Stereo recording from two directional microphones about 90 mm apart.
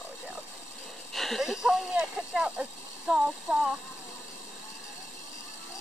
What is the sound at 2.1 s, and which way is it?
Child singing, 10° right (ahead or behind).